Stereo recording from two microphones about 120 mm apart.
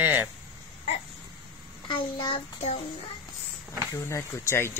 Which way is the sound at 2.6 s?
65° left (ahead or behind).